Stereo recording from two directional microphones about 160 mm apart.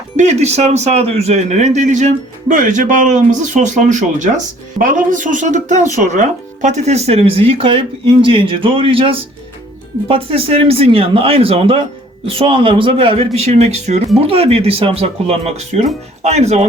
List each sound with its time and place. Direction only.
0.2 s speech: 45° right (ahead or behind)